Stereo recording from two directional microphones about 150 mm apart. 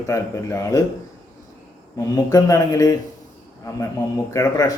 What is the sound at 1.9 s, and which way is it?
Speech, 25° left (ahead or behind).